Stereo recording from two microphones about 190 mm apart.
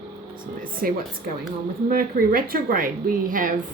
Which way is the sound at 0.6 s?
50° right (ahead or behind).